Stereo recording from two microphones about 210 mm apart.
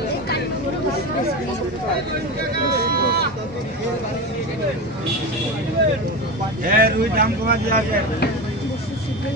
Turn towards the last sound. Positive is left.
turn(degrees=-45)  # may be behind; listen again after turning